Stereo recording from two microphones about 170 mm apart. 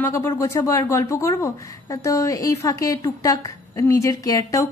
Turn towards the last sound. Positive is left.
turn(degrees=20)  # may be behind; listen again after turning